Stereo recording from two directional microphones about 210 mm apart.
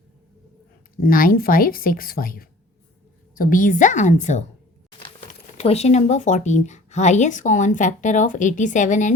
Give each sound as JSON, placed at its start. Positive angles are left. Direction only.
{"t": 0.9, "sound": "speech", "side_deg": 40}
{"t": 4.9, "sound": "a sound", "side_deg": 25}
{"t": 5.5, "sound": "speech", "side_deg": 30}